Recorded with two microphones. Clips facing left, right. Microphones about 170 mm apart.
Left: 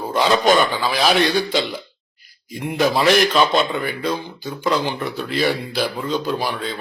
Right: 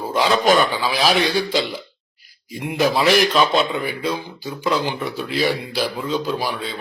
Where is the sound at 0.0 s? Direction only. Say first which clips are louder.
Left 1 dB; 5° right (ahead or behind).